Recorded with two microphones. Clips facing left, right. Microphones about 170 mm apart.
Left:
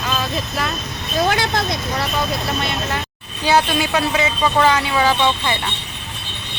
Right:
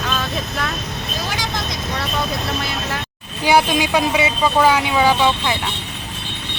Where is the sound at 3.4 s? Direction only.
10° right (ahead or behind).